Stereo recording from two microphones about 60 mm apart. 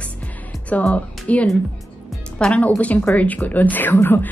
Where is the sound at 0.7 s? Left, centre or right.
Left.